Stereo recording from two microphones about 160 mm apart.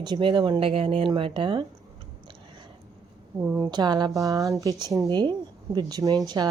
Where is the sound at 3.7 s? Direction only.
25° right (ahead or behind).